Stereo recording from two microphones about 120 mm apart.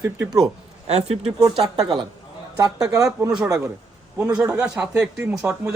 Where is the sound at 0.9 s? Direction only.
60° right (ahead or behind).